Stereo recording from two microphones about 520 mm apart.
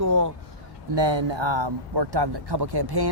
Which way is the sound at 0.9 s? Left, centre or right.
Right.